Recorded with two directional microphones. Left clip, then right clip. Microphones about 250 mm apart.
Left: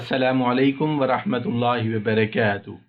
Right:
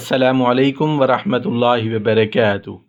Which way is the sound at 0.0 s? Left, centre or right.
Right.